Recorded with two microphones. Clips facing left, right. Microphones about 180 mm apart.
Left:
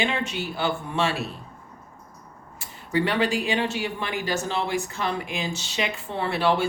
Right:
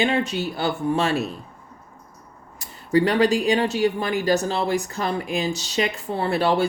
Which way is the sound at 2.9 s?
40° right (ahead or behind).